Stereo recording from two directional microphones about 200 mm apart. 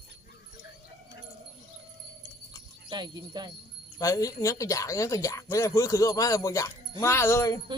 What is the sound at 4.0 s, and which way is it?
Speech, 15° left (ahead or behind).